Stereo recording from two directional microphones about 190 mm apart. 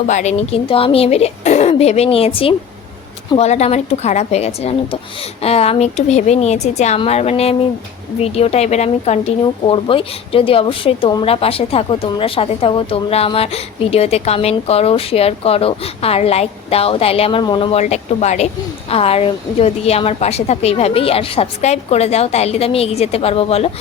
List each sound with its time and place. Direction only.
0.1 s speech: 40° left (ahead or behind)